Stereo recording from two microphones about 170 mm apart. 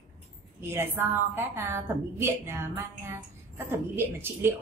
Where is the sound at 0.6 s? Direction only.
15° right (ahead or behind).